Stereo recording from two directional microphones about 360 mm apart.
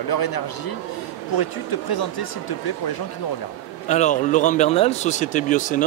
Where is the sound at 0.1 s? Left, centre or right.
Left.